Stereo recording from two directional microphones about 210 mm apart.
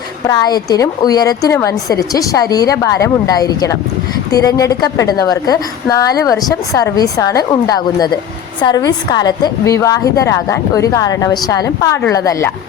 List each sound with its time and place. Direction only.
0.3 s a woman's voice: 20° left (ahead or behind)